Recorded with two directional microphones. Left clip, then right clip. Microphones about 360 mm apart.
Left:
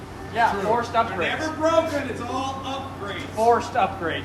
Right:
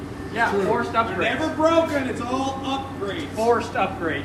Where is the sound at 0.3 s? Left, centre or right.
Left.